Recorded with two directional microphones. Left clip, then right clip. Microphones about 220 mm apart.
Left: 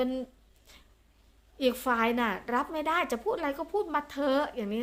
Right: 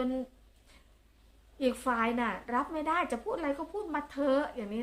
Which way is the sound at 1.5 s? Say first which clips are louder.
Left 3 dB; 45° left (ahead or behind).